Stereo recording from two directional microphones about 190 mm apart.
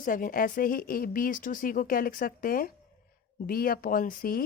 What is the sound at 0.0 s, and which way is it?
Speech, 45° left (ahead or behind).